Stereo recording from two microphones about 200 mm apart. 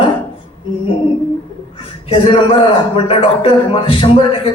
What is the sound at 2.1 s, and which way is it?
A man's voice, 25° left (ahead or behind).